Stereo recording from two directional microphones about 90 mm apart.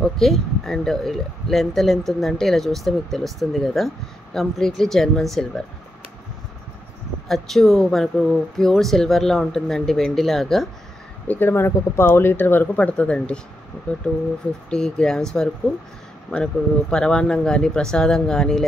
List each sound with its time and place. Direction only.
0.0 s speech: 5° left (ahead or behind)
7.2 s speech: 5° left (ahead or behind)
11.2 s speech: 20° left (ahead or behind); by 18.7 s 5° left (ahead or behind)